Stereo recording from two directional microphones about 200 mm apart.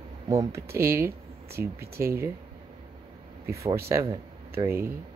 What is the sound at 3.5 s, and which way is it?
Speech, 15° right (ahead or behind).